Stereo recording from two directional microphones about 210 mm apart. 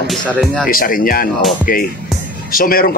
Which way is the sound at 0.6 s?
40° left (ahead or behind).